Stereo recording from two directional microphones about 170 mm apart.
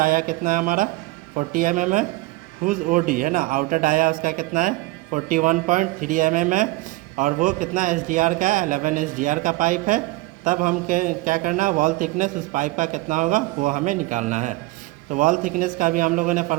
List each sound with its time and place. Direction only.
0.0 s a man's voice: 55° right (ahead or behind)